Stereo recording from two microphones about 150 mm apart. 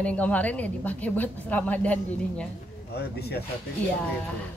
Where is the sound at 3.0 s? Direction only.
90° left.